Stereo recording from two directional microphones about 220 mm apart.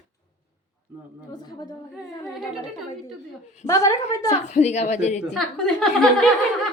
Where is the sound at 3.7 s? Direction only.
15° left (ahead or behind).